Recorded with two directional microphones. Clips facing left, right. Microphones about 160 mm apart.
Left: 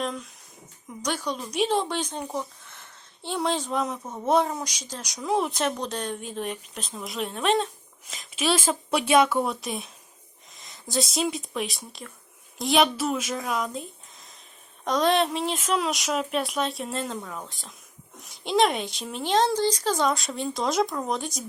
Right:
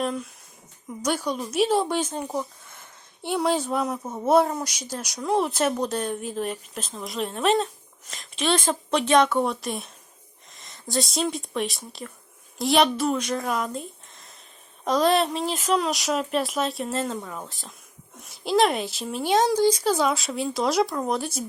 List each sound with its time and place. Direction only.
0.0 s speech: 5° right (ahead or behind)